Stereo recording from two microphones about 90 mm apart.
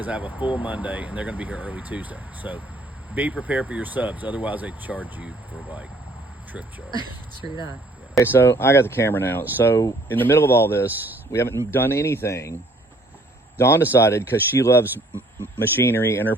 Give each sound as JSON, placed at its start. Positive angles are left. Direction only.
{"t": 0.0, "sound": "speech", "side_deg": -15}
{"t": 6.5, "sound": "speech", "side_deg": -15}
{"t": 8.2, "sound": "speech", "side_deg": 25}
{"t": 13.6, "sound": "speech", "side_deg": 25}